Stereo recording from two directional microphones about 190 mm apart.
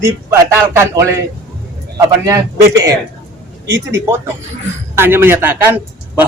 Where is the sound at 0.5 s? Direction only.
15° right (ahead or behind).